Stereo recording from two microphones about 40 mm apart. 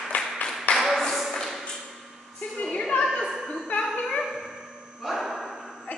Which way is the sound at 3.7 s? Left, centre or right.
Left.